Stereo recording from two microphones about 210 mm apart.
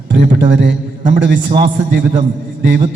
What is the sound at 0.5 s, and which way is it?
A man's voice, 55° right (ahead or behind).